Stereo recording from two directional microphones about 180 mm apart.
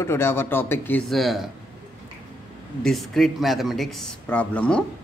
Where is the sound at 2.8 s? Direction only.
Centre (ahead or behind).